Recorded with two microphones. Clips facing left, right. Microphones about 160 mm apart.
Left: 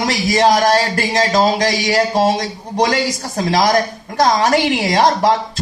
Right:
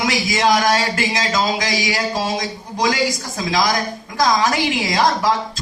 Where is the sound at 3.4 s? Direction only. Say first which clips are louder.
Left 5 dB; 40° left (ahead or behind).